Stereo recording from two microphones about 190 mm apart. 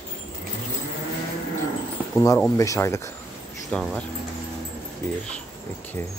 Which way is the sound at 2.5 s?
15° left (ahead or behind).